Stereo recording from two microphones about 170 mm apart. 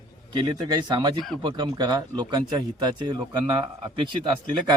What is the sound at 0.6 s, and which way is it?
Speech, 25° right (ahead or behind).